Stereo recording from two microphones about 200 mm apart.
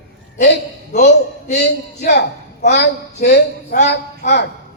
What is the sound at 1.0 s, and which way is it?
A man's voice, 55° left (ahead or behind).